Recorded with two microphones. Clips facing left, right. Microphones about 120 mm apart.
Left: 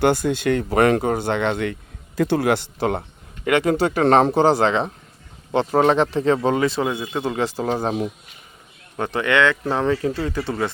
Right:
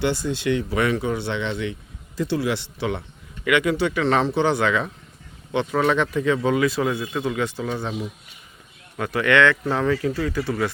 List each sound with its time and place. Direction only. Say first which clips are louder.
0.0 s a man's voice: left 5 dB; 55° left (ahead or behind)
9.0 s speech: even; 25° left (ahead or behind)